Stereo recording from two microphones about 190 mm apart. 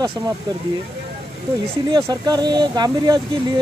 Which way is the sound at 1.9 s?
20° right (ahead or behind).